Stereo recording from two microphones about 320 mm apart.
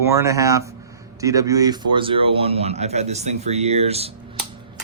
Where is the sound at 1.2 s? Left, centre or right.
Centre.